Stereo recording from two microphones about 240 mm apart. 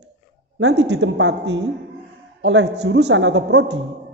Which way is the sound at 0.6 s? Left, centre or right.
Right.